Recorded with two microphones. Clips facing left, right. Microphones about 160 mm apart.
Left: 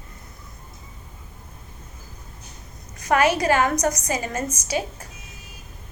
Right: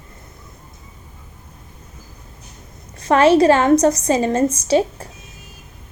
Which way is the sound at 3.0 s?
30° right (ahead or behind).